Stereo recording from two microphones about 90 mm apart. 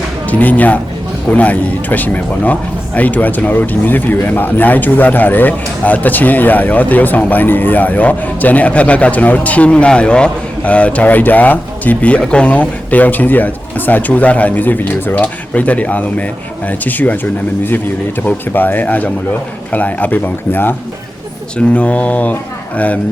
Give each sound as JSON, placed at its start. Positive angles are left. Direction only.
{"t": 0.3, "sound": "speech", "side_deg": 15}
{"t": 18.2, "sound": "speech", "side_deg": 20}